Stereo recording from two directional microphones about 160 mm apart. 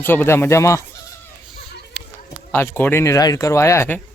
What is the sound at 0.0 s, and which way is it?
Speech, 10° left (ahead or behind).